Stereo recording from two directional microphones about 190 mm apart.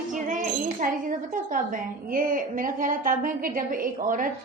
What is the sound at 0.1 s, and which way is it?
Speech, 45° right (ahead or behind).